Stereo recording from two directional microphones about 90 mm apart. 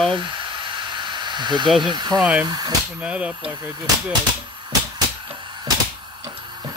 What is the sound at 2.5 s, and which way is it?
Speech, 50° right (ahead or behind).